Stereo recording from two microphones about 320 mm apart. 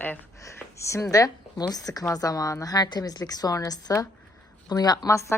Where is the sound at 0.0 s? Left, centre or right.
Centre.